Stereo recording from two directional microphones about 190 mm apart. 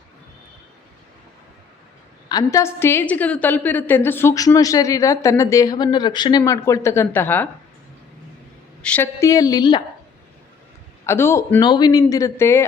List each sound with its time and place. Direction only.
2.3 s a woman's voice: 15° left (ahead or behind)
8.8 s a woman's voice: 10° left (ahead or behind)
11.0 s a woman's voice: 15° left (ahead or behind)
11.6 s a woman's voice: 25° left (ahead or behind)